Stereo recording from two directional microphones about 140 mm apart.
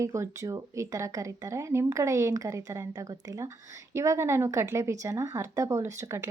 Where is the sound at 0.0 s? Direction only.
20° right (ahead or behind).